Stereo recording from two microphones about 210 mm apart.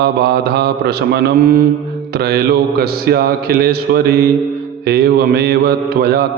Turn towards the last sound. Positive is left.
turn(degrees=-50)  # may be behind; listen again after turning